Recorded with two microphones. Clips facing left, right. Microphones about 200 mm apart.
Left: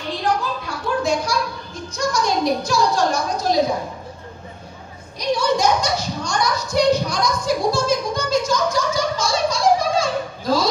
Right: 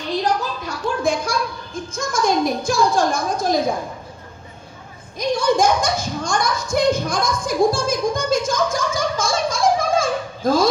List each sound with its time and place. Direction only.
0.2 s a sound: 45° right (ahead or behind)
1.9 s a child's voice: 50° right (ahead or behind)
5.2 s a child's voice: 50° right (ahead or behind)